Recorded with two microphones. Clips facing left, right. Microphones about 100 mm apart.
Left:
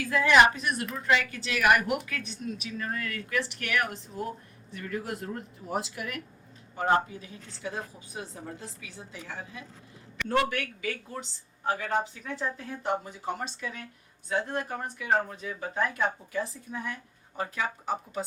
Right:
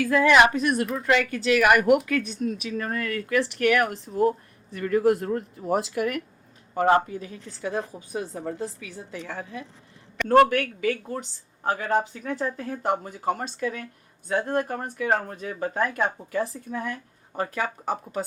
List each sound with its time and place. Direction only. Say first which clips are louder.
0.0 s speech: right 3 dB; 60° right (ahead or behind); by 0.5 s 75° right (ahead or behind)
0.5 s speech: right 8 dB; 55° right (ahead or behind)
0.9 s speech: right 4 dB; 70° right (ahead or behind)
2.0 s speech: right 10 dB; 55° right (ahead or behind)